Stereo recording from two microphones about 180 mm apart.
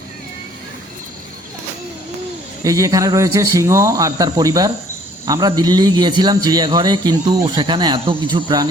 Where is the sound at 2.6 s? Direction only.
20° right (ahead or behind).